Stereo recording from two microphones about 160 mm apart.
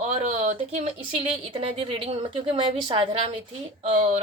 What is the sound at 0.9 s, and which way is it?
Speech, 35° right (ahead or behind).